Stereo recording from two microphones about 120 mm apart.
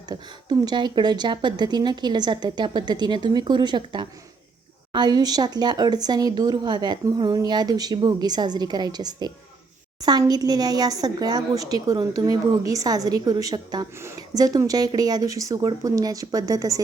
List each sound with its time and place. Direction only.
0.1 s speech: 35° right (ahead or behind)